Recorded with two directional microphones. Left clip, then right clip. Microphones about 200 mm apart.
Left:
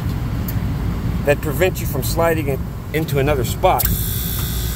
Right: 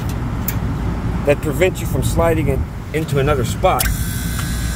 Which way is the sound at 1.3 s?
Centre (ahead or behind).